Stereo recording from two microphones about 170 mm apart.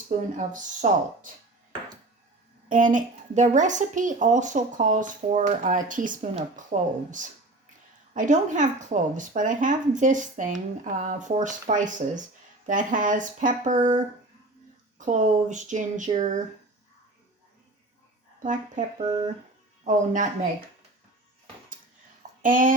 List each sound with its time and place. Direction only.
0.3 s speech: 45° right (ahead or behind)
2.6 s speech: 50° right (ahead or behind)
18.4 s speech: 50° right (ahead or behind)
18.9 s speech: 35° right (ahead or behind)
22.4 s speech: 50° right (ahead or behind)